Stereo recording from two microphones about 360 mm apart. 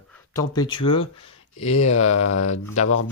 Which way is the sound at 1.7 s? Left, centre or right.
Left.